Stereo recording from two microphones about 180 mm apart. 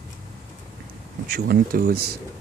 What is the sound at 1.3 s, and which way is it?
Speech, 60° right (ahead or behind).